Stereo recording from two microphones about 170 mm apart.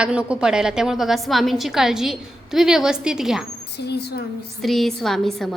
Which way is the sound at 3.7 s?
75° left (ahead or behind).